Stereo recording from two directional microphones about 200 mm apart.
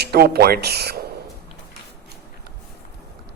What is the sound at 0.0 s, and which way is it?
Speech, 50° right (ahead or behind).